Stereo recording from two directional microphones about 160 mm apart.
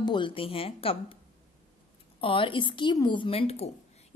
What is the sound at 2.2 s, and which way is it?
A woman's voice, 35° left (ahead or behind).